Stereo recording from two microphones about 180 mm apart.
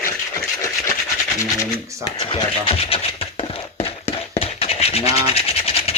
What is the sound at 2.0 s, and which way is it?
Scratch, 30° left (ahead or behind).